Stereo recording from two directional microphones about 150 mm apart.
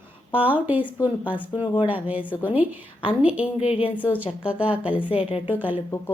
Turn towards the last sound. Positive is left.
turn(degrees=-10)  # may be behind; listen again after turning